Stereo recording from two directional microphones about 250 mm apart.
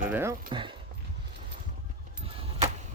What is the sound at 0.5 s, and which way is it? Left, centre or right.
Speech, centre.